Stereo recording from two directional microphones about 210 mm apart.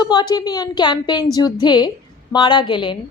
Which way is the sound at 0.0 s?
20° left (ahead or behind).